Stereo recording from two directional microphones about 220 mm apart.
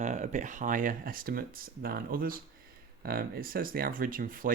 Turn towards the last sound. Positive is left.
turn(degrees=-40)  # may be behind; listen again after turning